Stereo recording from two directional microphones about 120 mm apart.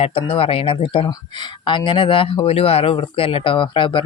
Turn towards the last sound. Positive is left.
turn(degrees=45)  # may be behind; listen again after turning